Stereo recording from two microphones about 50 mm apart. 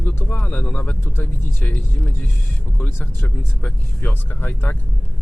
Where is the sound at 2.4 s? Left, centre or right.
Left.